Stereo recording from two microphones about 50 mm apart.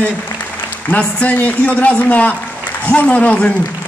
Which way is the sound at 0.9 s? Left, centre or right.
Left.